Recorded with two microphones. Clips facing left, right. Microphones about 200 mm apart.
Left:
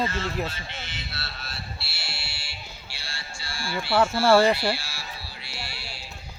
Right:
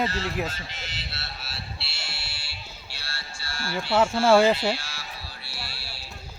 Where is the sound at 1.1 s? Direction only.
25° right (ahead or behind).